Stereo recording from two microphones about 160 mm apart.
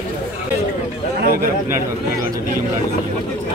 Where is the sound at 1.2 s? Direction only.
65° right (ahead or behind).